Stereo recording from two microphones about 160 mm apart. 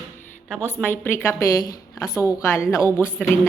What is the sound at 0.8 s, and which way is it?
A woman's voice, 15° left (ahead or behind).